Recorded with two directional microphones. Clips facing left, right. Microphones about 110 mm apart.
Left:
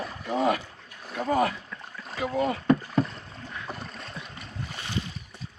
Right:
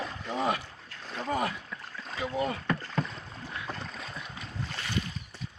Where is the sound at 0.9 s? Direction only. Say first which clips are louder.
Left 5 dB; 10° left (ahead or behind).